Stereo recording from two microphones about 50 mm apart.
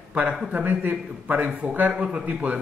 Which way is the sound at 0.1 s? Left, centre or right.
Right.